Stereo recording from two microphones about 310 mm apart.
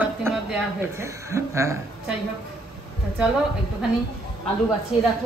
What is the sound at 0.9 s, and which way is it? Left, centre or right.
Speech, centre.